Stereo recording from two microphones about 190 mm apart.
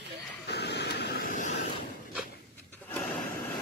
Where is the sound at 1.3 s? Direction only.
40° left (ahead or behind).